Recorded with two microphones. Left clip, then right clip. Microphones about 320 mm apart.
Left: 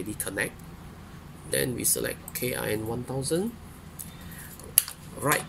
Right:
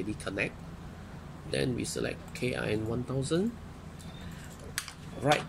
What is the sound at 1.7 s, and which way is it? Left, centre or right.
Speech, left.